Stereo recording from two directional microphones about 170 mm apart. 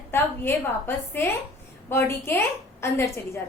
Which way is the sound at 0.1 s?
15° left (ahead or behind).